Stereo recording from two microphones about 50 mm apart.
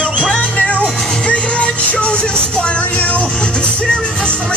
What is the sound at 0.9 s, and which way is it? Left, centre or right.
Speech, centre.